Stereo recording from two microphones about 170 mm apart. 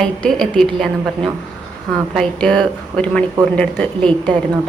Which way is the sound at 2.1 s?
5° left (ahead or behind).